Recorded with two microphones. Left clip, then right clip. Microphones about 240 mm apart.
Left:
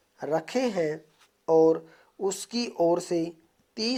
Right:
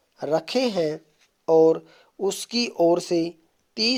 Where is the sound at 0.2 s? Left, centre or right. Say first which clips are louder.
Right 4 dB; right.